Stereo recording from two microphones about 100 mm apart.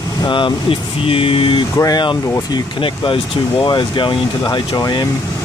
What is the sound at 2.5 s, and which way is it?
Speech, 60° left (ahead or behind).